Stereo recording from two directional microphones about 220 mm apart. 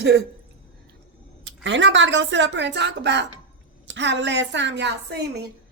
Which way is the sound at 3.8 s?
55° right (ahead or behind).